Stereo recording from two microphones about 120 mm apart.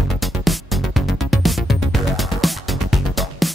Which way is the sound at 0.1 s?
Centre (ahead or behind).